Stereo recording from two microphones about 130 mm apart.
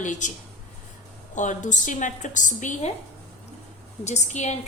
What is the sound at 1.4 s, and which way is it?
A woman's voice, 70° left (ahead or behind).